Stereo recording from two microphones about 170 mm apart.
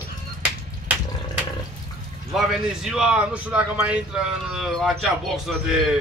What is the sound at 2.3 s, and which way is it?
A man's voice, 5° right (ahead or behind).